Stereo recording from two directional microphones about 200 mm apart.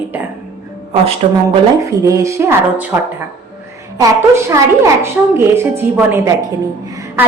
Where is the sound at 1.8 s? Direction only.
15° right (ahead or behind).